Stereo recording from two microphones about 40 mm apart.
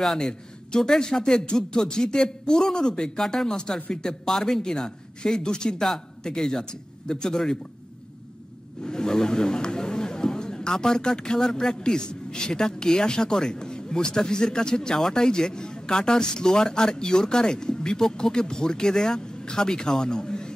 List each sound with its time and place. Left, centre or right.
0.0 s speech: centre
0.3 s a man's voice: centre
8.8 s speech: centre